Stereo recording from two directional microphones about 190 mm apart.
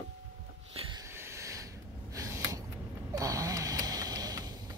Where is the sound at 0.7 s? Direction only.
30° right (ahead or behind).